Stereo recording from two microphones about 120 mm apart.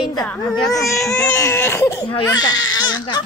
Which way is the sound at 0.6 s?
30° left (ahead or behind).